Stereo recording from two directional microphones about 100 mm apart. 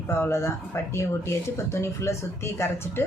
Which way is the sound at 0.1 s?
25° left (ahead or behind).